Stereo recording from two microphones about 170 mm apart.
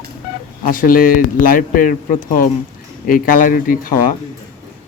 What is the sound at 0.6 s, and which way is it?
Speech, 55° left (ahead or behind).